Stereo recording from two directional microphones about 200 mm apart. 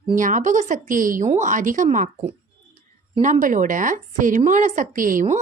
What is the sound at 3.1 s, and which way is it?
A woman's voice, 40° right (ahead or behind).